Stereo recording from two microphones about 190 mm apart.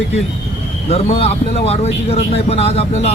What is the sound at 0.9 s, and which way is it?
Speech, 30° left (ahead or behind).